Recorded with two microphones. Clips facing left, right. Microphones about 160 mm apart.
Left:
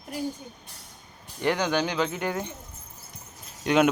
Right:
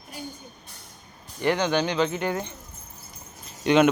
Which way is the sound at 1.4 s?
10° left (ahead or behind).